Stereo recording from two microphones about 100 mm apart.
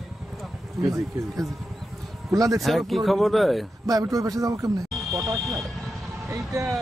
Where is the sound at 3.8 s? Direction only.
35° right (ahead or behind).